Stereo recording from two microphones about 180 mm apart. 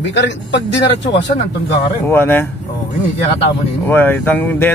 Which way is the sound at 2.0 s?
15° left (ahead or behind).